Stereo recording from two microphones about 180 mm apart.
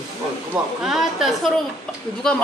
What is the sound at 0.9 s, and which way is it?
Speech, centre (ahead or behind).